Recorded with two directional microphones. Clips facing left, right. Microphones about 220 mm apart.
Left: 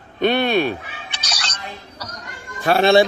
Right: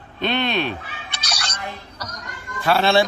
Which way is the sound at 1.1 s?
10° right (ahead or behind).